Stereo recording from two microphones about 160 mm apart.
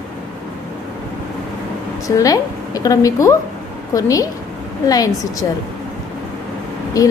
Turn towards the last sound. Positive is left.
turn(degrees=20)  # may be behind; listen again after turning